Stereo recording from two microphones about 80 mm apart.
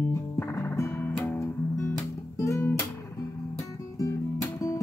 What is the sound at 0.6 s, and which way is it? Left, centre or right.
Music, left.